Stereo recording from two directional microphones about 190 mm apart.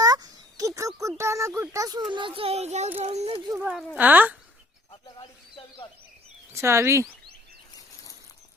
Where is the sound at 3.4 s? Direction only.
10° right (ahead or behind).